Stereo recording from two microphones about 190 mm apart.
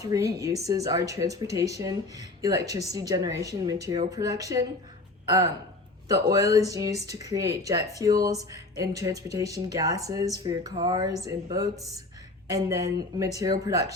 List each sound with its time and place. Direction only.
0.0 s speech: 15° right (ahead or behind)
6.3 s speech: 15° right (ahead or behind)